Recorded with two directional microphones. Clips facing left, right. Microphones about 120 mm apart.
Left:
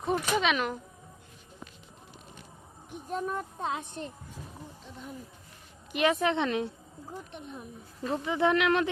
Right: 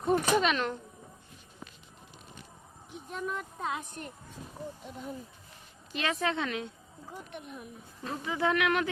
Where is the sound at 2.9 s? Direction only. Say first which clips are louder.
Left 3 dB; 40° left (ahead or behind).